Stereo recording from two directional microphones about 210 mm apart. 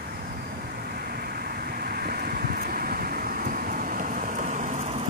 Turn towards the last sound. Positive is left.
turn(degrees=-35)  # may be behind; listen again after turning